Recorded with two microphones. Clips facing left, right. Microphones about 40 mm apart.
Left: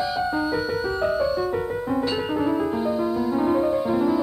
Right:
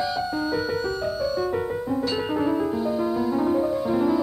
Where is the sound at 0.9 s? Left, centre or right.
Left.